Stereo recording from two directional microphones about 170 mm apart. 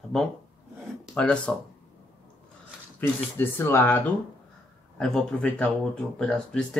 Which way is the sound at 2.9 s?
10° left (ahead or behind).